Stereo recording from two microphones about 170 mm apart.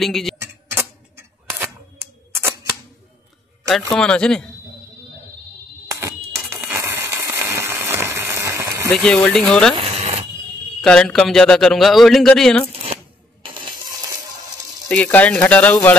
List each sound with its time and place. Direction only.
0.0 s speech: centre (ahead or behind)
0.4 s tick: 10° right (ahead or behind)
1.6 s camera: 15° right (ahead or behind)
3.6 s speech: 5° left (ahead or behind)
5.9 s a sound: 20° right (ahead or behind)
8.9 s speech: 5° left (ahead or behind)
9.8 s cash register: 35° right (ahead or behind)
10.8 s speech: 5° left (ahead or behind)
12.7 s a sound: 35° right (ahead or behind)
14.9 s speech: 10° left (ahead or behind)